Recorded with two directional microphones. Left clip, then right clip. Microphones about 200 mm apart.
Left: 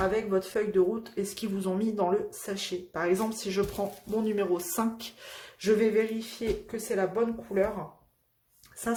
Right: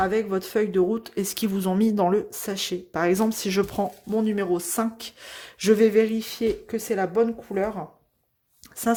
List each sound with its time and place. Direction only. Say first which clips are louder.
0.0 s speech: right 4 dB; 50° right (ahead or behind)